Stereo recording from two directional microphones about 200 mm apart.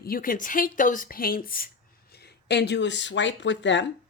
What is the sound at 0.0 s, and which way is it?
A woman's voice, 45° left (ahead or behind).